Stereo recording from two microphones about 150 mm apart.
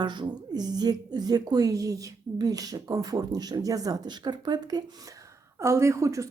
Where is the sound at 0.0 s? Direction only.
30° right (ahead or behind).